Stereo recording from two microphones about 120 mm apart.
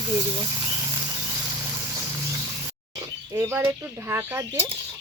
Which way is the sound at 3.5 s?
20° right (ahead or behind).